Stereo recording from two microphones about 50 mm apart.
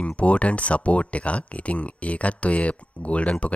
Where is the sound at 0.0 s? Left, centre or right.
Left.